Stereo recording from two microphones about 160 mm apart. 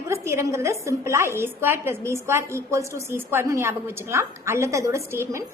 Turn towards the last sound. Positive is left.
turn(degrees=-15)  # may be behind; listen again after turning